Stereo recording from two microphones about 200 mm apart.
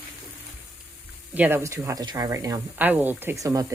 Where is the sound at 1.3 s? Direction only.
10° right (ahead or behind).